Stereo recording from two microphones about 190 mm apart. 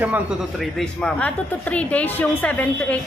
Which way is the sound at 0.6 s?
5° left (ahead or behind).